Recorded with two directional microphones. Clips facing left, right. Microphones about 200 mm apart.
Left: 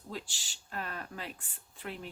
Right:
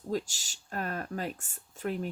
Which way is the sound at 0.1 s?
45° right (ahead or behind).